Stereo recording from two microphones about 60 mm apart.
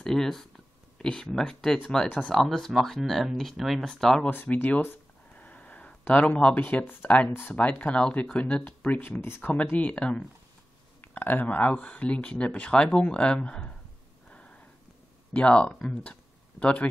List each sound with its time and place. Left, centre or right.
0.0 s speech: centre
3.9 s speech: centre
5.3 s a sound: left
6.5 s speech: left
7.5 s speech: centre; by 9.4 s left
9.4 s speech: left
11.0 s speech: left
15.3 s speech: centre